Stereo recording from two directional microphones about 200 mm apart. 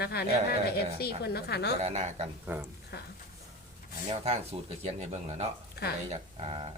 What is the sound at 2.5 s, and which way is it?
Speech, 10° right (ahead or behind).